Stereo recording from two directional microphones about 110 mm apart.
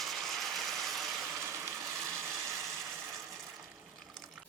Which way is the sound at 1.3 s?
25° right (ahead or behind).